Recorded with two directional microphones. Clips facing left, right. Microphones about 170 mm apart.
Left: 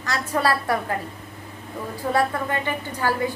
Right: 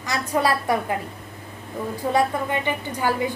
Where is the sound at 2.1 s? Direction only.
15° right (ahead or behind).